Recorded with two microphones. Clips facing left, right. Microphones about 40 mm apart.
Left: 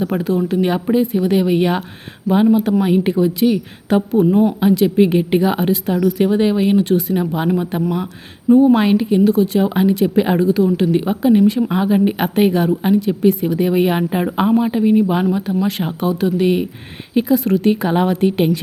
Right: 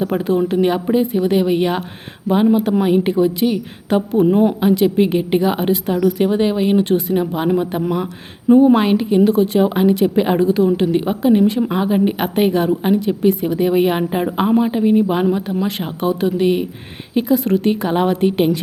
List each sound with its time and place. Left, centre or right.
0.0 s speech: centre
0.7 s a woman's voice: centre
2.8 s speech: centre
4.3 s speech: centre
8.7 s a woman's voice: centre